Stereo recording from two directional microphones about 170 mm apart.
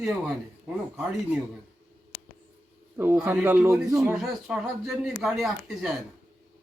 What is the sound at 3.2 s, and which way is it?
Speech, 10° right (ahead or behind).